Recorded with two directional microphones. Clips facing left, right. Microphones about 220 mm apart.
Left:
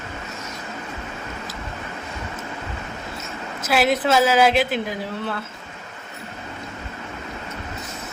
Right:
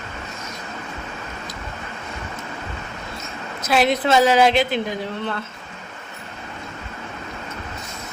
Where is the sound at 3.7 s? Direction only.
5° left (ahead or behind).